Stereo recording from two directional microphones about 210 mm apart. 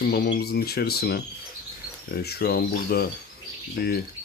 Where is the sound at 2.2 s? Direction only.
50° left (ahead or behind).